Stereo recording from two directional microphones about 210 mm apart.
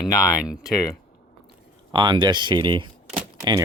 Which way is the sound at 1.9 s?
20° right (ahead or behind).